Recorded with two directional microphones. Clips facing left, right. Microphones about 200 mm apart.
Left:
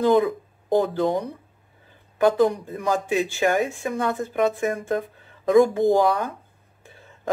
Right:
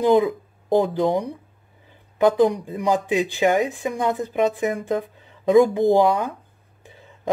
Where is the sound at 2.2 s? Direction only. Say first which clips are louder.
Right 2 dB; 15° right (ahead or behind).